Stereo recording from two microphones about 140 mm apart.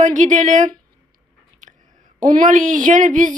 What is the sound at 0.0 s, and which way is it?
Speech, 60° right (ahead or behind).